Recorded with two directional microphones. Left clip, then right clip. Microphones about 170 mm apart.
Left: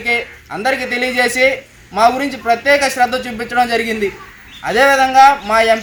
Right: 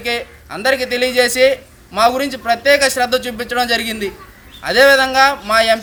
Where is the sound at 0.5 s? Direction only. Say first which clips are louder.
Right 1 dB; 35° right (ahead or behind).